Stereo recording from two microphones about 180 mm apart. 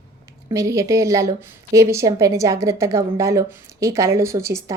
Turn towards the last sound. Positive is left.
turn(degrees=-15)  # may be behind; listen again after turning